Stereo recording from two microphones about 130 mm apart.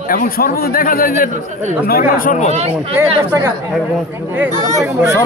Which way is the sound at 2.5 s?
55° right (ahead or behind).